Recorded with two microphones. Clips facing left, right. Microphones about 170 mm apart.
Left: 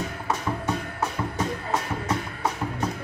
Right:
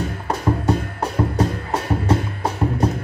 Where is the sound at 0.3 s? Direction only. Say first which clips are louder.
Right 7 dB; 35° right (ahead or behind).